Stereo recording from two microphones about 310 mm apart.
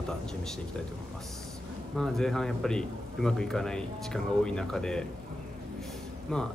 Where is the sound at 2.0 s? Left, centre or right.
Centre.